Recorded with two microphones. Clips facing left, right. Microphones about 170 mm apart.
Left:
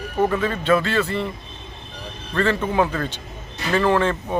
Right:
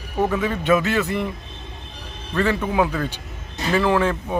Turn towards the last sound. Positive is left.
turn(degrees=-5)  # may be behind; listen again after turning